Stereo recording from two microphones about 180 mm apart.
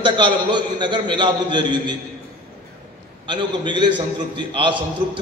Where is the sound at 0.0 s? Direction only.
25° right (ahead or behind).